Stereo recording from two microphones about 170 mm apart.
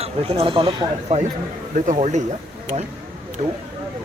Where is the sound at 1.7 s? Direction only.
50° right (ahead or behind).